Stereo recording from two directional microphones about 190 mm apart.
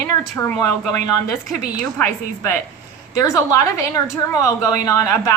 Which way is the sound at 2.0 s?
15° left (ahead or behind).